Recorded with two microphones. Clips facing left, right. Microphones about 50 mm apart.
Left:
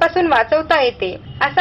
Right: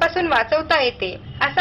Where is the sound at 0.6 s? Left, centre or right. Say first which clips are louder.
Left 4 dB; centre.